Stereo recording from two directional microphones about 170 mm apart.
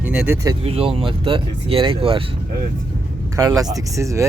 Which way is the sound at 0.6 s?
35° right (ahead or behind).